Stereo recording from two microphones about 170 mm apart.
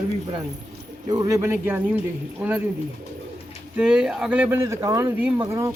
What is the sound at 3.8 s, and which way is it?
A man's voice, 5° right (ahead or behind).